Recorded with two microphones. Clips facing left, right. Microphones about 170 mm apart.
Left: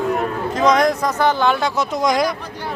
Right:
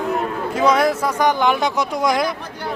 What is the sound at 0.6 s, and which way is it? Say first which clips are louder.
Speech: left 1 dB; 10° right (ahead or behind).